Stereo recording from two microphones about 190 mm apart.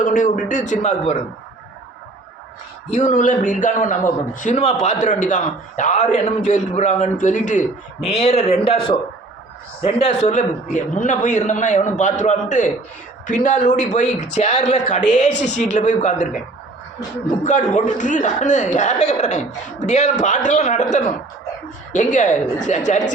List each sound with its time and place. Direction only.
0.0 s a man's voice: 45° left (ahead or behind)
2.9 s a man's voice: 40° left (ahead or behind)
8.1 s a man's voice: 30° left (ahead or behind)
17.4 s a man's voice: 40° left (ahead or behind)
21.9 s a man's voice: 40° left (ahead or behind)